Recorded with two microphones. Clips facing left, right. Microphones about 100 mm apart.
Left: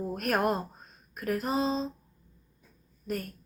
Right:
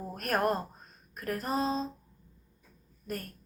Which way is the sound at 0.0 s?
15° left (ahead or behind).